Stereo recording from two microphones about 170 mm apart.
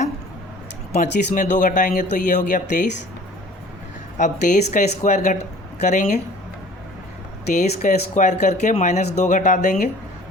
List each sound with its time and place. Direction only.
0.9 s speech: 45° left (ahead or behind)
4.2 s speech: 45° left (ahead or behind)
7.5 s speech: 45° left (ahead or behind)